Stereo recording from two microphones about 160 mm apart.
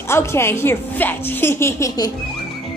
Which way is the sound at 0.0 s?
15° left (ahead or behind).